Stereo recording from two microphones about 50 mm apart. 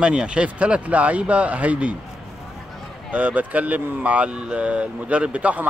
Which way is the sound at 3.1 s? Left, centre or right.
Right.